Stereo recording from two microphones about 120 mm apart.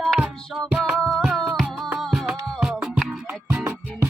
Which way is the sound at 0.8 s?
5° left (ahead or behind).